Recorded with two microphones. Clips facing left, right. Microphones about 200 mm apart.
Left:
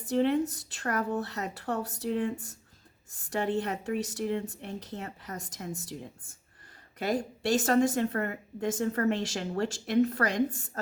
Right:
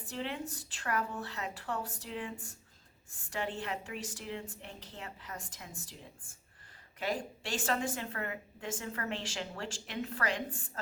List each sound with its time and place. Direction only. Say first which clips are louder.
0.0 s a woman's voice: left 13 dB; 40° left (ahead or behind)